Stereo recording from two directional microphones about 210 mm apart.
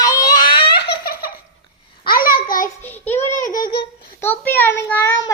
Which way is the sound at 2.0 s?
45° left (ahead or behind).